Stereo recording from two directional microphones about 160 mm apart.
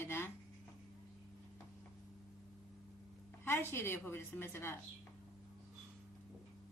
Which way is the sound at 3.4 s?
15° left (ahead or behind).